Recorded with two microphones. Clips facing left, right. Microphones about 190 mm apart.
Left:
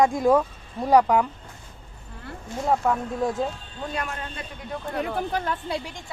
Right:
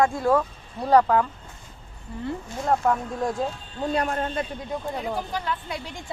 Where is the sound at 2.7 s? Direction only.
Centre (ahead or behind).